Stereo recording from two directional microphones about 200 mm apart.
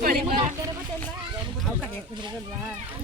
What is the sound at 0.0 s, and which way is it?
Speech, 45° right (ahead or behind).